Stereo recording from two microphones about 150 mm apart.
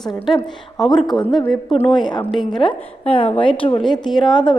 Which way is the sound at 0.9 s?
30° left (ahead or behind).